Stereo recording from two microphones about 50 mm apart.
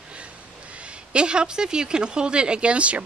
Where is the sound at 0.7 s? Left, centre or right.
Right.